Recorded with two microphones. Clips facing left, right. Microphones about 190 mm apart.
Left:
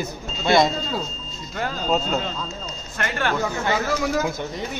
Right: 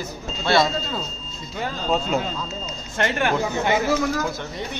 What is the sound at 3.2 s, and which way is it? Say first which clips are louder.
Speech: left 1 dB; 20° right (ahead or behind).